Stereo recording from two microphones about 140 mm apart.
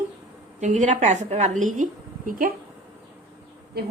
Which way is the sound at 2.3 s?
80° right.